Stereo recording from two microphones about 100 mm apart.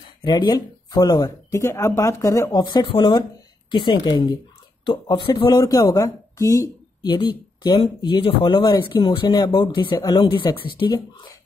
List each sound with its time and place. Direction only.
0.2 s speech: 50° left (ahead or behind); by 2.5 s 30° left (ahead or behind)
2.5 s speech: 45° left (ahead or behind)